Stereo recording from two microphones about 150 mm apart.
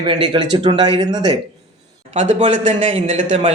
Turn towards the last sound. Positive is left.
turn(degrees=-50)  # may be behind; listen again after turning